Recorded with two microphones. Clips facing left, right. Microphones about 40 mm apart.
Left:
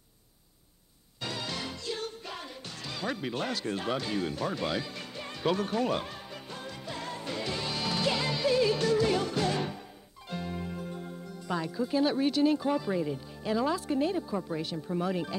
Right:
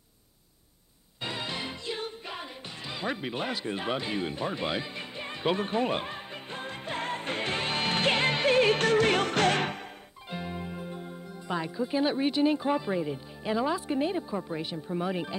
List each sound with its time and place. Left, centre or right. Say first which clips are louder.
1.2 s music: right 2 dB; right
10.3 s speech: even; centre